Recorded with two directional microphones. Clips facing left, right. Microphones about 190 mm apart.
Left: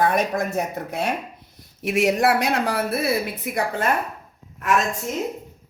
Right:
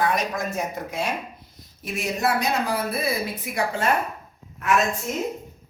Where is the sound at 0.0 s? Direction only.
55° left (ahead or behind).